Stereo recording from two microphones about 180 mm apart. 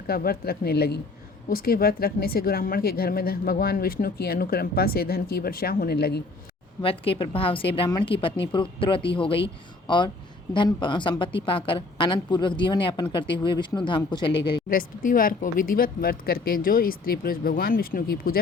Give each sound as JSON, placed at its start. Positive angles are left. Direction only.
{"t": 0.1, "sound": "a woman's voice", "side_deg": 55}
{"t": 6.8, "sound": "a woman's voice", "side_deg": 30}
{"t": 14.7, "sound": "speech", "side_deg": 50}